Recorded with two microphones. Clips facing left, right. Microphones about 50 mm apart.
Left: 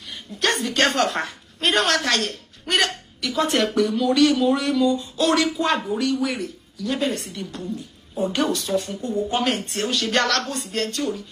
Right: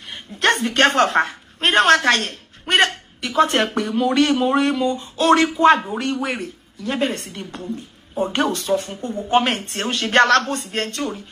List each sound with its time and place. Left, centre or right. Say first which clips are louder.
0.1 s a woman's voice: right 5 dB; right